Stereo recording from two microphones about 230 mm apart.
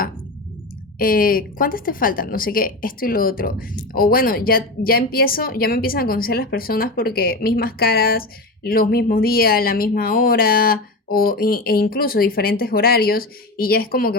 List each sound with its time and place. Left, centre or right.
0.9 s speech: left